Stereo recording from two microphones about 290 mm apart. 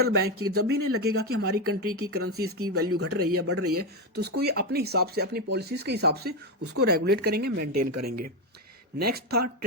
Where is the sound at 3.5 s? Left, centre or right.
Right.